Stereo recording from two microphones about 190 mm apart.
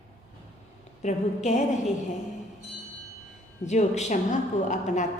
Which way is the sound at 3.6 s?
35° left (ahead or behind).